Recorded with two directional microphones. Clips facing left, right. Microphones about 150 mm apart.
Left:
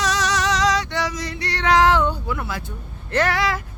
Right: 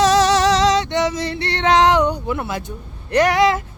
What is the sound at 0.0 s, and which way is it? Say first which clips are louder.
Music: right 8 dB; 30° right (ahead or behind).